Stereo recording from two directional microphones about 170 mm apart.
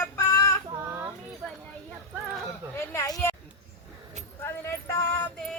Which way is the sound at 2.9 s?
20° left (ahead or behind).